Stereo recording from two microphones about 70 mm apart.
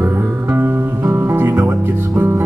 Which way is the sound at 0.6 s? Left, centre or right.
Right.